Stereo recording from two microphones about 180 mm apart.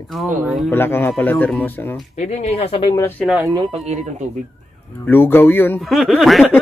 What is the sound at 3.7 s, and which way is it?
Speech, 40° right (ahead or behind).